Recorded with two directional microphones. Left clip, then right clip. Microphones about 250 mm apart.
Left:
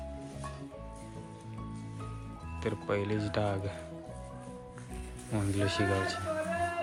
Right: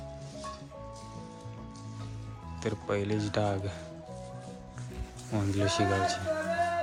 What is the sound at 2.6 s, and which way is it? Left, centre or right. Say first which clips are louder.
Speech: right 1 dB; centre.